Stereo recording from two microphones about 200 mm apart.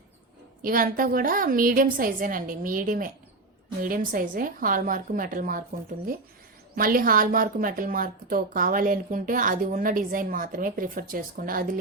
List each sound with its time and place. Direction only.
0.6 s a woman's voice: 45° right (ahead or behind)
6.7 s a woman's voice: 45° right (ahead or behind)